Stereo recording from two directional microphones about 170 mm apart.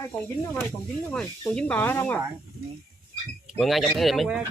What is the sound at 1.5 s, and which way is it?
Speech, 10° left (ahead or behind).